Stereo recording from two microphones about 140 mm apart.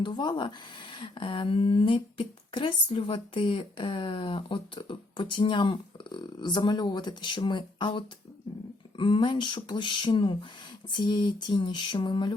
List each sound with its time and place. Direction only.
0.0 s speech: 35° left (ahead or behind)